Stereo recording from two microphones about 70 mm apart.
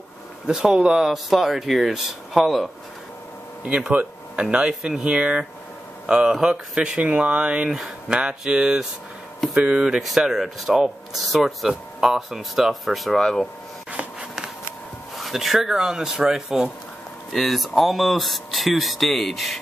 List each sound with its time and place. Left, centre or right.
0.5 s speech: centre
3.6 s speech: centre
15.1 s speech: centre